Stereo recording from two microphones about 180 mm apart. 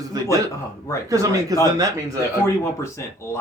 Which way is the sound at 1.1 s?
20° right (ahead or behind).